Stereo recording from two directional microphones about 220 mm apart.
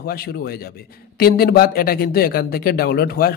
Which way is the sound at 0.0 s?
45° left (ahead or behind).